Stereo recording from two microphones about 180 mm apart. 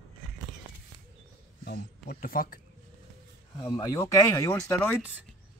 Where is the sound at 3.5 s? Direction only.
20° left (ahead or behind).